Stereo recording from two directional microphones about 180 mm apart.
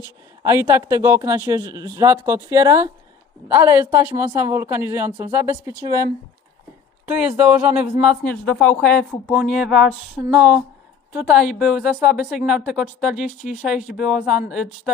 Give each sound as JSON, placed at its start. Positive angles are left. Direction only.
{"t": 0.0, "sound": "speech", "side_deg": -15}
{"t": 7.0, "sound": "speech", "side_deg": -5}